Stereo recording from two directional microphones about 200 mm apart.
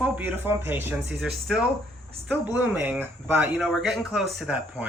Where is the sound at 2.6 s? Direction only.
10° right (ahead or behind).